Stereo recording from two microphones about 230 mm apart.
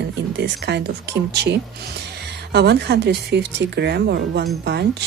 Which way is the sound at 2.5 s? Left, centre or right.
Right.